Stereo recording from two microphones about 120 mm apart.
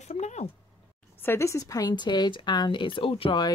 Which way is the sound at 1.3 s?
25° left (ahead or behind).